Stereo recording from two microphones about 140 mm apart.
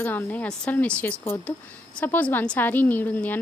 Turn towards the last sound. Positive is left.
turn(degrees=15)  # may be behind; listen again after turning